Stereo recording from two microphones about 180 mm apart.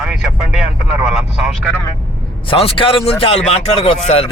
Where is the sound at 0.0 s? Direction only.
5° right (ahead or behind).